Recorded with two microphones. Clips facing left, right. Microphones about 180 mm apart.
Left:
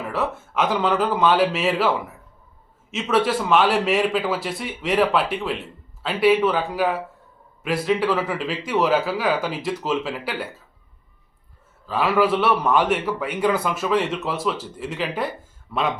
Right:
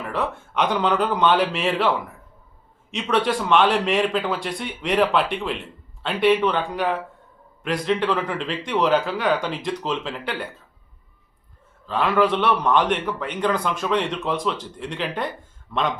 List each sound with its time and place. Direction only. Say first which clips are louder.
0.0 s a man's voice: left 1 dB; 5° left (ahead or behind)
11.9 s a man's voice: even; 5° left (ahead or behind)